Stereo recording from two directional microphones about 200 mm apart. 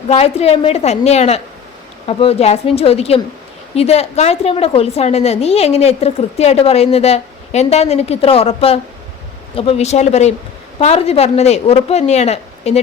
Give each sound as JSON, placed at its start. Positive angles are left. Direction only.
{"t": 0.1, "sound": "a woman's voice", "side_deg": 30}